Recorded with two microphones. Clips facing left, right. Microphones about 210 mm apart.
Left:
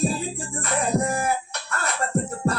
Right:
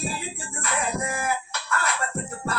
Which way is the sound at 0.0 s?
35° left (ahead or behind).